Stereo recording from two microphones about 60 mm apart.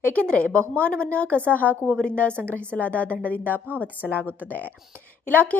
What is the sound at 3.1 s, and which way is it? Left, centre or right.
Speech, right.